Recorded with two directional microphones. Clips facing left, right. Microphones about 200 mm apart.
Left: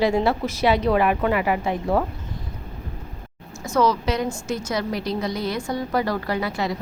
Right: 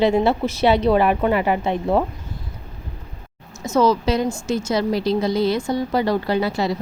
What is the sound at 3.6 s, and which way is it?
Speech, 25° right (ahead or behind).